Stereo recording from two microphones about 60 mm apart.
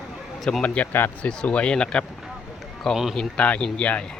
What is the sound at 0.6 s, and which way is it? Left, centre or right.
Speech, left.